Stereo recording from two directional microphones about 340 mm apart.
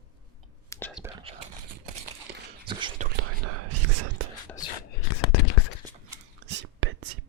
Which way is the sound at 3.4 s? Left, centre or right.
Right.